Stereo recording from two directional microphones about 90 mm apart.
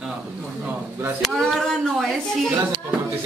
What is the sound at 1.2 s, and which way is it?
Speech, centre (ahead or behind).